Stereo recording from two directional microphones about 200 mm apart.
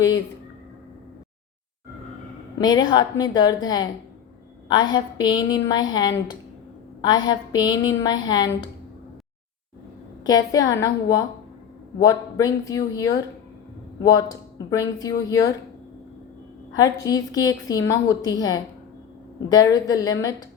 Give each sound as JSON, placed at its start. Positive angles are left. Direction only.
{"t": 2.6, "sound": "a woman's voice", "side_deg": 20}
{"t": 10.2, "sound": "speech", "side_deg": 20}
{"t": 16.7, "sound": "a woman's voice", "side_deg": 20}